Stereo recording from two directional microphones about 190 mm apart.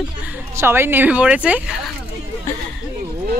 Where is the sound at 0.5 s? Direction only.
10° right (ahead or behind).